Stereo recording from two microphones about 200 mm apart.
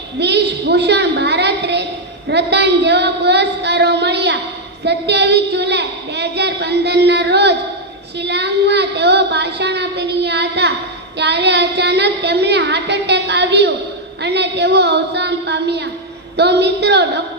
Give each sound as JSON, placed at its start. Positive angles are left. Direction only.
{"t": 0.2, "sound": "a woman's voice", "side_deg": -55}